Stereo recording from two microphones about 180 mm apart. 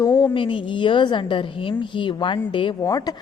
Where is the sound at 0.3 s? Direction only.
30° left (ahead or behind).